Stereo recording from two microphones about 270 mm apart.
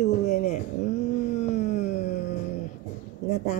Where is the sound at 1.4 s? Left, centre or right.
Left.